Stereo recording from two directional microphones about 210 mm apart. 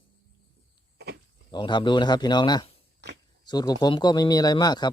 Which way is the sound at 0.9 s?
50° right (ahead or behind).